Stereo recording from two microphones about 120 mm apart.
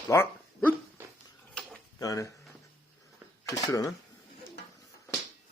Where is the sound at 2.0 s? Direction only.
30° left (ahead or behind).